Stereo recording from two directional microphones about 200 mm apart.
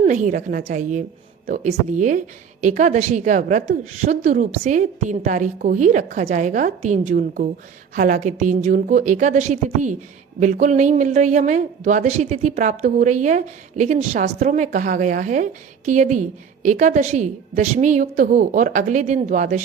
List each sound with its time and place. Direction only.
0.0 s a woman's voice: 35° right (ahead or behind)